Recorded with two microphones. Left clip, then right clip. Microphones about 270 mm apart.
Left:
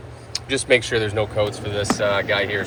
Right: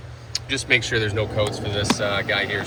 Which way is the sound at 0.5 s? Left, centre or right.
Centre.